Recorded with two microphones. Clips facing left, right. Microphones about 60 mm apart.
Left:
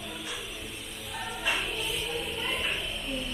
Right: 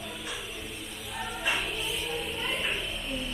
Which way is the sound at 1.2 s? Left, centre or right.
Centre.